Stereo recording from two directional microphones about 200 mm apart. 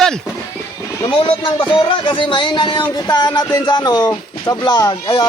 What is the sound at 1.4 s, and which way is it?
Speech, 25° left (ahead or behind).